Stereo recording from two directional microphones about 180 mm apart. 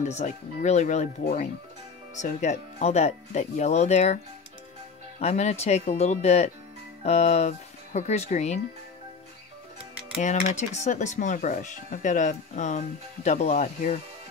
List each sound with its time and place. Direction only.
0.0 s speech: 40° left (ahead or behind)
2.1 s speech: 40° left (ahead or behind)
5.2 s speech: 40° left (ahead or behind)
10.1 s speech: 40° left (ahead or behind)